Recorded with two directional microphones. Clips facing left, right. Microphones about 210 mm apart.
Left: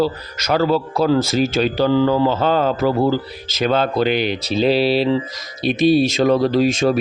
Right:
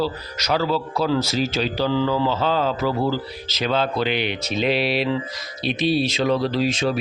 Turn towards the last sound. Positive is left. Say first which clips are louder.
# left 6 dB
turn(degrees=45)  # may be behind; listen again after turning